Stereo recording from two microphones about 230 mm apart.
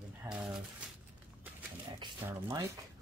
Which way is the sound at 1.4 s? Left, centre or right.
Centre.